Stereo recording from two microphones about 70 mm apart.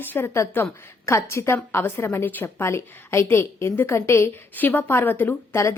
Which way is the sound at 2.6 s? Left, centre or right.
Left.